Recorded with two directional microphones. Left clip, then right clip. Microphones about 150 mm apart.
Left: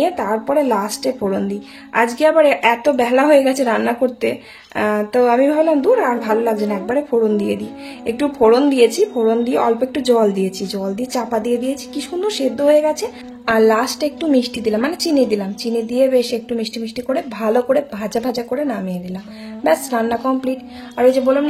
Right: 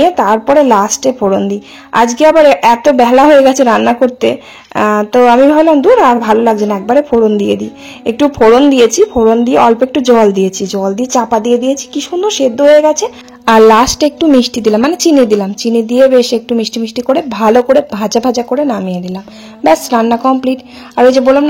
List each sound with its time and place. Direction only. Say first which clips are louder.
0.0 s a woman's voice: right 9 dB; 40° right (ahead or behind)
13.5 s a woman's voice: right 9 dB; 55° right (ahead or behind)